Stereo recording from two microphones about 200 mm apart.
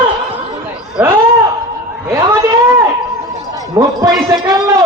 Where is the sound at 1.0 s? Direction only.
10° right (ahead or behind).